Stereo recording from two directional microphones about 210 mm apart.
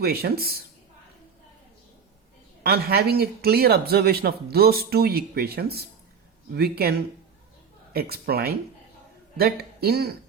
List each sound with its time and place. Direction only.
0.0 s speech: 45° right (ahead or behind)
2.6 s speech: 50° right (ahead or behind)
7.9 s speech: 50° right (ahead or behind)